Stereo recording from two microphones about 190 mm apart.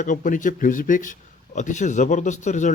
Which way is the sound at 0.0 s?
40° left (ahead or behind).